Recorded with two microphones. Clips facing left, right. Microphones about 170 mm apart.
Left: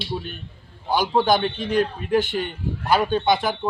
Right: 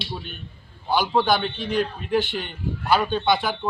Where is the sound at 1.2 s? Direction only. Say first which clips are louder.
Left 2 dB; 45° left (ahead or behind).